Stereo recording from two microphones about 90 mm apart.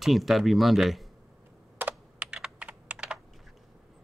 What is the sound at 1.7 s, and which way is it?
Computer keyboard, 20° right (ahead or behind).